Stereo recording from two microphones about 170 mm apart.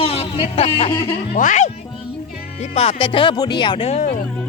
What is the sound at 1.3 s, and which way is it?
Speech, 45° left (ahead or behind).